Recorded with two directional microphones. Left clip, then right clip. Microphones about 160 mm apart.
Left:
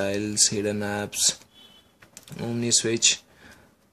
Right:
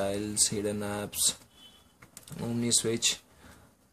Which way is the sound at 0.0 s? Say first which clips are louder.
Left 6 dB; 25° left (ahead or behind).